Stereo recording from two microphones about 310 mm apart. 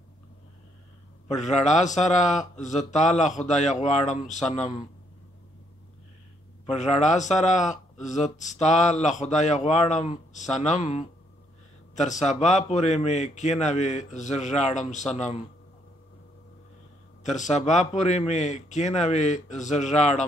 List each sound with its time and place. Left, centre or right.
1.3 s speech: left
6.6 s speech: left
17.2 s speech: left